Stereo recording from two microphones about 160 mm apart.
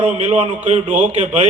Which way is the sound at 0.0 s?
45° right (ahead or behind).